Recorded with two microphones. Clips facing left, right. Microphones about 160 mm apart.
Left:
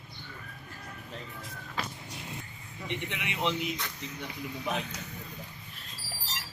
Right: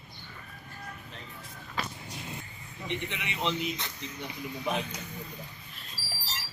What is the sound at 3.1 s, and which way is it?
Speech, 10° left (ahead or behind).